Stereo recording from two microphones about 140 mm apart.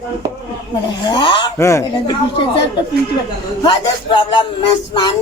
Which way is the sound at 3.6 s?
35° left (ahead or behind).